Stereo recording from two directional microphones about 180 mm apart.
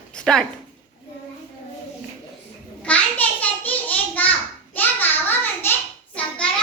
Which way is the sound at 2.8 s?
10° left (ahead or behind).